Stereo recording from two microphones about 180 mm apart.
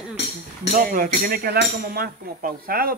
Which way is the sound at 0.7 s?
55° right (ahead or behind).